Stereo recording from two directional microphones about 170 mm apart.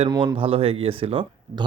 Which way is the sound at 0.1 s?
25° right (ahead or behind).